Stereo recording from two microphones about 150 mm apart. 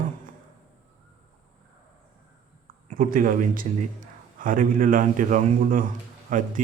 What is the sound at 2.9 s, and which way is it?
Speech, 65° right (ahead or behind).